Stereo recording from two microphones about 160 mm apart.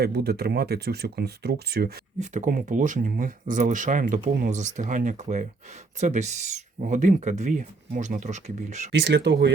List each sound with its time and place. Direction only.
0.0 s speech: 80° right
2.1 s speech: 50° right (ahead or behind)
8.9 s speech: 90° right